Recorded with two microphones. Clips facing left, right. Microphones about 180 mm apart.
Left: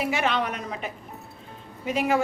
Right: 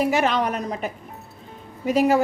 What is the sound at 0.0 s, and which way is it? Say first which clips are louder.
Speech: right 5 dB; 40° right (ahead or behind).